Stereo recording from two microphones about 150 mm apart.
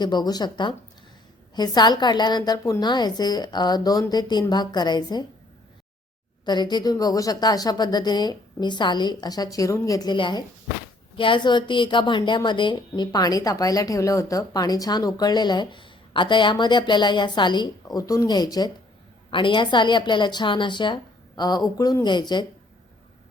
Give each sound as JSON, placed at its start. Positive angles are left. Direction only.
{"t": 0.0, "sound": "a woman's voice", "side_deg": 30}
{"t": 6.4, "sound": "a woman's voice", "side_deg": 30}